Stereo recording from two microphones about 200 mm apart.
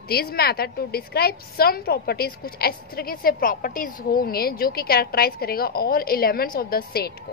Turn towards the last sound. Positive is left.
turn(degrees=50)  # may be behind; listen again after turning